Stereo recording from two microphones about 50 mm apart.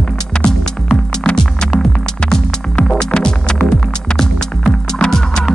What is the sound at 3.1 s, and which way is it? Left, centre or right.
Music, centre.